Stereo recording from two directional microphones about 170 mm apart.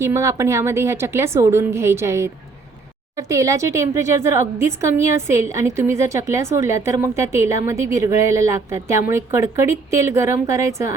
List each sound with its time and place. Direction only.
0.0 s speech: 15° right (ahead or behind)